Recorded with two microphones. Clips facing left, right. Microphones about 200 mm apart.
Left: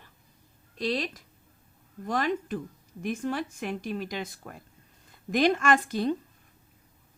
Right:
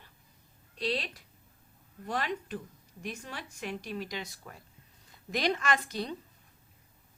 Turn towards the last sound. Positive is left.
turn(degrees=50)  # may be behind; listen again after turning